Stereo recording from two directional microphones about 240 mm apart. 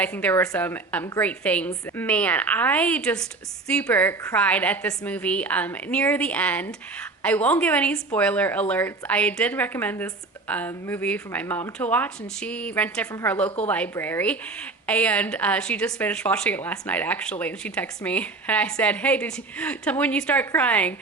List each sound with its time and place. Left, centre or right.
0.0 s a woman's voice: centre